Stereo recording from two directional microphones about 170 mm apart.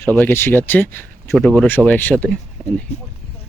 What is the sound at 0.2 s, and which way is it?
Speech, 10° left (ahead or behind).